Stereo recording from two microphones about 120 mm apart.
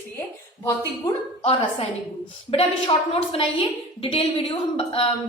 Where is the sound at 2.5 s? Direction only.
55° left (ahead or behind).